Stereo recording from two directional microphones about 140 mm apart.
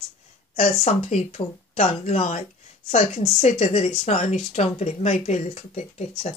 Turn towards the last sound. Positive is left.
turn(degrees=50)  # may be behind; listen again after turning